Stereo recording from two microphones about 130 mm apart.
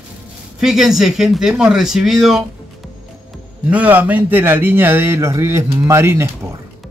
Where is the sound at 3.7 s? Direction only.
10° right (ahead or behind).